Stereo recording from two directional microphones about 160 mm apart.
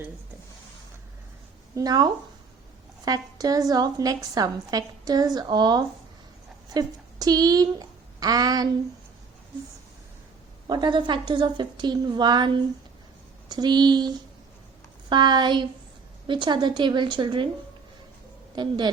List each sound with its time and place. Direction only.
1.7 s a woman's voice: 25° right (ahead or behind)
10.7 s a woman's voice: 30° right (ahead or behind)
13.5 s a woman's voice: 25° right (ahead or behind)
15.1 s a woman's voice: 30° right (ahead or behind)
18.5 s a woman's voice: 30° right (ahead or behind)